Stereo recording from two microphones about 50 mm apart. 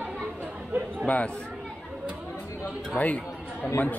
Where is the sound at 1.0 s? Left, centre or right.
Left.